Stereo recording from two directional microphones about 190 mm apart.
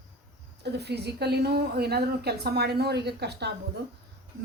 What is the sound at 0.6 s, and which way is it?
A woman's voice, 60° right (ahead or behind).